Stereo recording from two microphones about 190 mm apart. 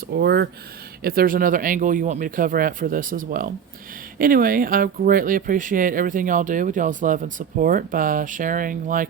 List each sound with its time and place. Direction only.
0.1 s speech: 60° right (ahead or behind)